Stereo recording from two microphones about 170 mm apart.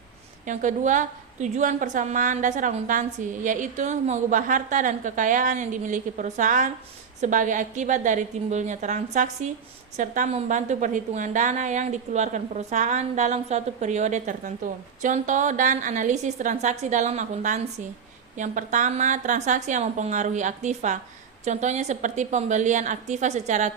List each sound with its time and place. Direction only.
0.4 s a woman's voice: 50° right (ahead or behind)